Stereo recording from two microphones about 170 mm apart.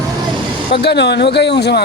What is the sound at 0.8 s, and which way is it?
Speech, 85° left.